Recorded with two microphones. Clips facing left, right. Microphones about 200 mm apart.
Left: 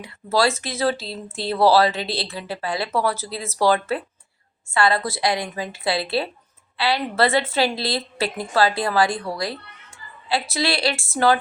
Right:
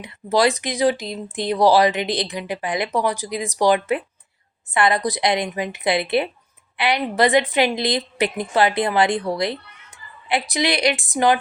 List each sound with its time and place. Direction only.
0.0 s a woman's voice: 20° right (ahead or behind)